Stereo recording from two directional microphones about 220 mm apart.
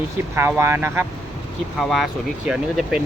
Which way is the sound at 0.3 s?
10° right (ahead or behind).